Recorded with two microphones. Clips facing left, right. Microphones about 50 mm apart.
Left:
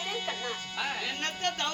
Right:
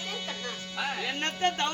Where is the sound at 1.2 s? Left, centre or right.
Right.